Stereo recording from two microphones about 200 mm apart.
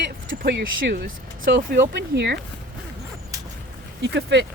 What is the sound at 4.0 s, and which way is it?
Speech, 60° right (ahead or behind).